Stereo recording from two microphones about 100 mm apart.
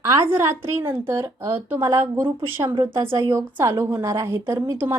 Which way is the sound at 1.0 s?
30° right (ahead or behind).